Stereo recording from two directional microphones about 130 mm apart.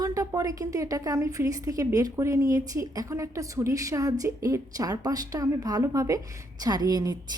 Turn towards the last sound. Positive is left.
turn(degrees=-30)  # may be behind; listen again after turning